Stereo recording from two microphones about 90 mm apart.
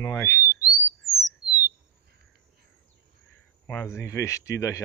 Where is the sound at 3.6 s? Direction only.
25° left (ahead or behind).